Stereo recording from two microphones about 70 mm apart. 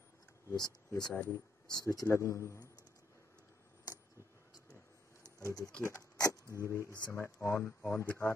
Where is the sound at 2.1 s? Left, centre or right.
Left.